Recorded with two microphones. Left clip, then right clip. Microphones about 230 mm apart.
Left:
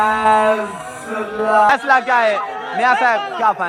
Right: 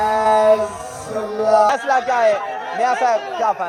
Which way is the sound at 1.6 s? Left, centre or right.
Centre.